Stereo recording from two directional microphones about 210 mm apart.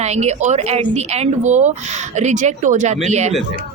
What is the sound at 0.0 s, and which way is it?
A woman's voice, 30° right (ahead or behind).